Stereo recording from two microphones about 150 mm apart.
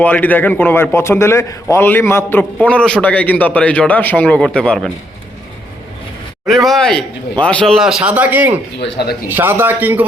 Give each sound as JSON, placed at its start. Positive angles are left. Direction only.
{"t": 0.0, "sound": "a man's voice", "side_deg": 10}
{"t": 6.5, "sound": "a man's voice", "side_deg": 0}
{"t": 9.0, "sound": "a man's voice", "side_deg": 90}
{"t": 9.3, "sound": "a man's voice", "side_deg": -15}